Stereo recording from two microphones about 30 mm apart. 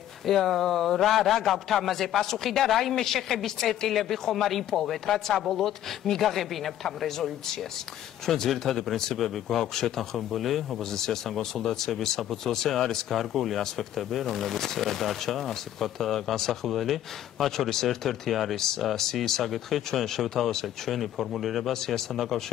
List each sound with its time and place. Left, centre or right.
0.3 s speech: centre
6.2 s speech: centre
7.1 s speech: centre
10.8 s speech: centre
21.7 s speech: centre